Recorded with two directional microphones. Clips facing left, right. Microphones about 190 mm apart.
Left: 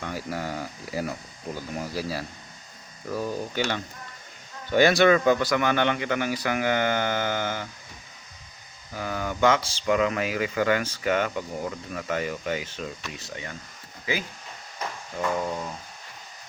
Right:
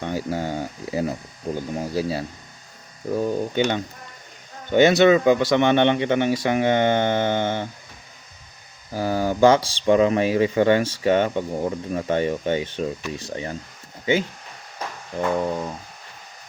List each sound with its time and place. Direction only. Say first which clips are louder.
0.0 s speech: right 6 dB; 25° right (ahead or behind)
8.9 s speech: right 8 dB; 35° right (ahead or behind)